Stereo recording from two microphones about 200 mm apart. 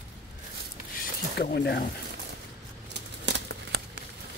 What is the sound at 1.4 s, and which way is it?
Speech, 55° left (ahead or behind).